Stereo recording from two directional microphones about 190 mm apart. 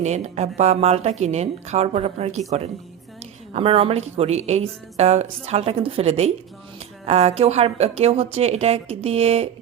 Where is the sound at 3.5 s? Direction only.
30° right (ahead or behind).